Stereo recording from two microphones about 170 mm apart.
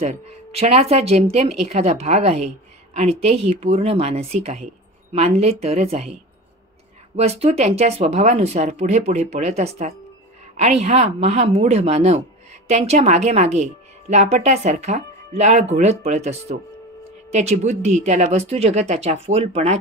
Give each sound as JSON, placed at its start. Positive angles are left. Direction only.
{"t": 0.0, "sound": "a woman's voice", "side_deg": -35}
{"t": 7.2, "sound": "a woman's voice", "side_deg": -35}